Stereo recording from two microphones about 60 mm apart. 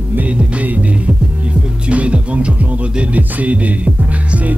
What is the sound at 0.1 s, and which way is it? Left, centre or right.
Music, right.